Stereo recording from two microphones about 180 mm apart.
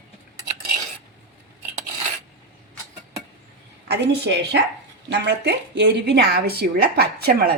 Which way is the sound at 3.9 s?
70° right (ahead or behind).